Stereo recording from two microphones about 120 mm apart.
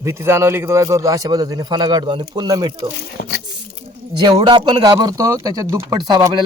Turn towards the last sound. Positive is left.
turn(degrees=-35)  # may be behind; listen again after turning